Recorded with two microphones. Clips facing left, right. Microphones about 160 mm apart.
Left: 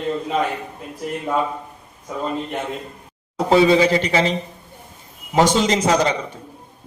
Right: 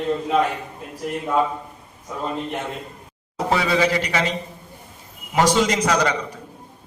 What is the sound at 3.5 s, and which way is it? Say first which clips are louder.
Speech: left 6 dB; 25° left (ahead or behind).